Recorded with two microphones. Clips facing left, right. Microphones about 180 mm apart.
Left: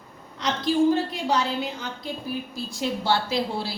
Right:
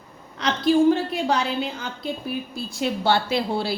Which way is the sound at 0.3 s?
65° right (ahead or behind).